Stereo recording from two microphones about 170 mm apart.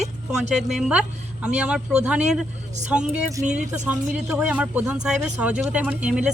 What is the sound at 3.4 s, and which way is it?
Speech, 20° right (ahead or behind).